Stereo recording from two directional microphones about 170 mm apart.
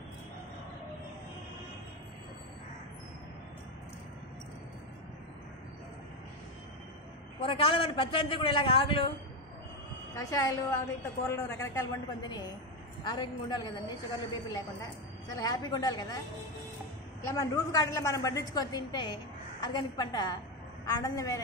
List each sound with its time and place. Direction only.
7.3 s a man's voice: 30° left (ahead or behind)
10.1 s a woman's voice: 20° left (ahead or behind)
15.3 s a woman's voice: 25° left (ahead or behind)
17.2 s a woman's voice: 20° left (ahead or behind)